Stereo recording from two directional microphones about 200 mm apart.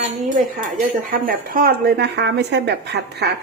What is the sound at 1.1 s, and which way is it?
Speech, 45° right (ahead or behind).